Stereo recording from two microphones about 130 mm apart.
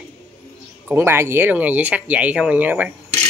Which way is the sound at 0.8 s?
20° right (ahead or behind).